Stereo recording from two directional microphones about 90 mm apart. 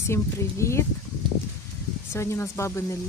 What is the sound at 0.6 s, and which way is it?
Speech, 30° left (ahead or behind).